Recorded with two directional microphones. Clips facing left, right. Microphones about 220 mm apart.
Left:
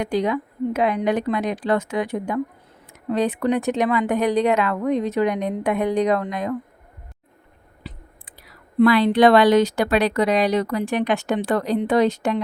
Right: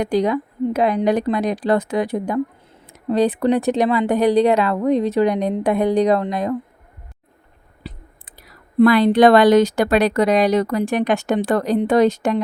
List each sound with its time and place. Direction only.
0.0 s speech: 40° right (ahead or behind)
7.9 s speech: 40° right (ahead or behind)